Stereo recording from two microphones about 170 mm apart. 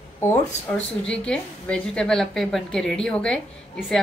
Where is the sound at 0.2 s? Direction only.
15° left (ahead or behind).